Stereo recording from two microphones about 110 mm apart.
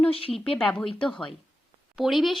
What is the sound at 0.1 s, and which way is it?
Speech, 60° left (ahead or behind).